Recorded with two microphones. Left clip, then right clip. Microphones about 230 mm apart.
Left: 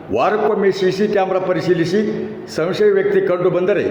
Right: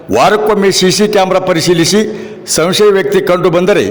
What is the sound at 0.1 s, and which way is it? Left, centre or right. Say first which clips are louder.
A man's voice: right 7 dB; right.